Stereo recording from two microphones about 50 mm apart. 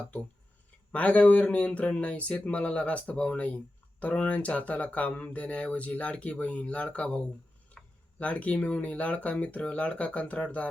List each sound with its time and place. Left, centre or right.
0.9 s speech: left
7.8 s a sound: centre
8.2 s speech: left